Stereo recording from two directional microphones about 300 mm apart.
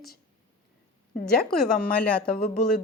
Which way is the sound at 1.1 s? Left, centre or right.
Left.